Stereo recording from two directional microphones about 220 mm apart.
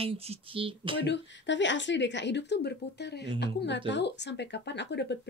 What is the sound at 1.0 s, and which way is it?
Speech, 55° left (ahead or behind).